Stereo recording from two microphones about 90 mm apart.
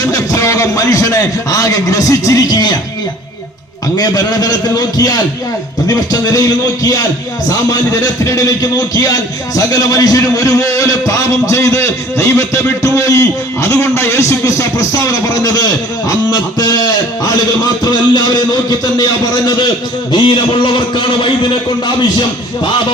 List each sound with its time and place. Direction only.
0.0 s a man's voice: 40° left (ahead or behind)
3.9 s a man's voice: 45° left (ahead or behind)
5.9 s a man's voice: 40° left (ahead or behind)
7.7 s a man's voice: 40° left (ahead or behind)
9.6 s a man's voice: 40° left (ahead or behind)
20.1 s a man's voice: 70° left (ahead or behind)